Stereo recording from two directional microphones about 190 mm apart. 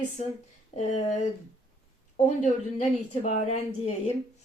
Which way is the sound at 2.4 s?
40° left (ahead or behind).